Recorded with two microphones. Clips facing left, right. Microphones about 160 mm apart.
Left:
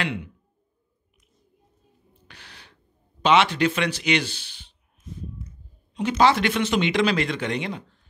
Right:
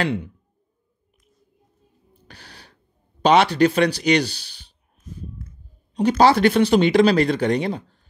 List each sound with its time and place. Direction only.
0.0 s speech: 35° right (ahead or behind)
2.2 s a sound: 35° right (ahead or behind)
5.9 s speech: 35° right (ahead or behind)